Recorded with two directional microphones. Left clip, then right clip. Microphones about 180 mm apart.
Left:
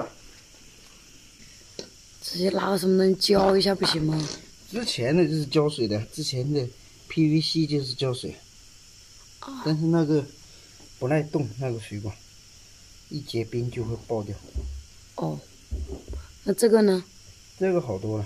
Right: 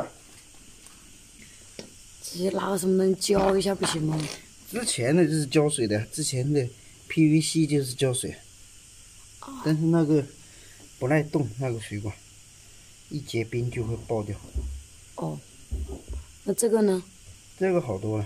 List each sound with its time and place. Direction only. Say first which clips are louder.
2.2 s speech: left 3 dB; centre (ahead or behind)
4.7 s speech: even; 15° right (ahead or behind)
9.4 s speech: left 2 dB; 5° left (ahead or behind)
9.7 s speech: even; 10° right (ahead or behind)
15.1 s hum: left 3 dB; 5° left (ahead or behind)
16.4 s speech: left 3 dB; 5° left (ahead or behind)